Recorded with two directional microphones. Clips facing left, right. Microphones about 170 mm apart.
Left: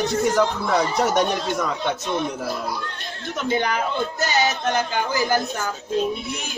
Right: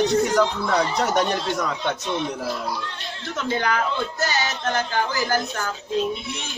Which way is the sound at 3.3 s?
20° left (ahead or behind).